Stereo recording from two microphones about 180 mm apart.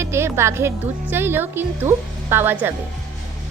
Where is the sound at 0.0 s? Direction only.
15° right (ahead or behind).